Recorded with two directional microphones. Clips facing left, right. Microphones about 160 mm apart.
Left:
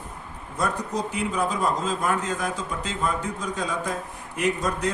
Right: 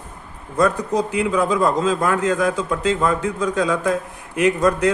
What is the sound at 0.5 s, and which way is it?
A man's voice, 90° right.